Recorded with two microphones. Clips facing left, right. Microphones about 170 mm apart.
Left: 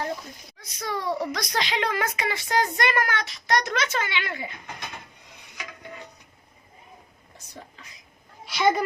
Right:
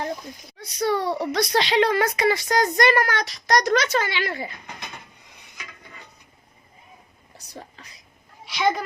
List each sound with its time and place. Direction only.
0.6 s a child's voice: 30° right (ahead or behind)
8.4 s a woman's voice: centre (ahead or behind)